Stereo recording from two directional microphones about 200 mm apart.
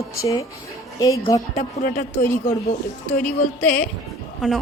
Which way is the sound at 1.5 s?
40° left (ahead or behind).